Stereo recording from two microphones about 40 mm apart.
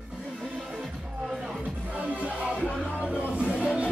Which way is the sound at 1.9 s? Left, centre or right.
Right.